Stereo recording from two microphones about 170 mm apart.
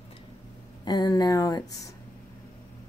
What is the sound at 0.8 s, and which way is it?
Speech, 25° left (ahead or behind).